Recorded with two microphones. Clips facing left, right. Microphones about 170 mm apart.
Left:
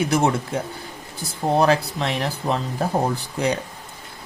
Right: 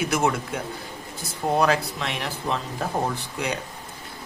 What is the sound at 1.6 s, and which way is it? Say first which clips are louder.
Speech: left 4 dB; 30° left (ahead or behind).